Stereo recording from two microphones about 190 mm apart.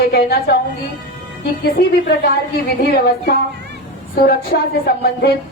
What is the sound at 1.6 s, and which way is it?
A woman's voice, 55° left (ahead or behind).